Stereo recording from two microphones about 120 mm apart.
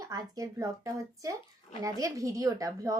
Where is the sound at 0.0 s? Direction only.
30° right (ahead or behind).